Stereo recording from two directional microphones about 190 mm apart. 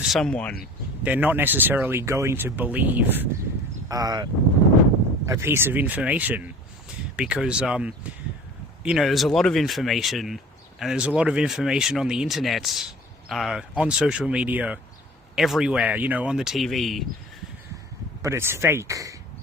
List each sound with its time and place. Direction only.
0.0 s speech: centre (ahead or behind)
1.0 s speech: 10° right (ahead or behind)
18.2 s speech: 15° right (ahead or behind)